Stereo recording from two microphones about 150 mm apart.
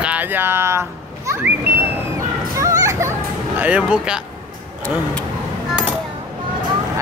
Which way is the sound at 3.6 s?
10° right (ahead or behind).